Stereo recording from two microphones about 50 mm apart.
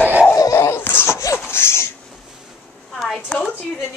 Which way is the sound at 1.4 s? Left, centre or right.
Left.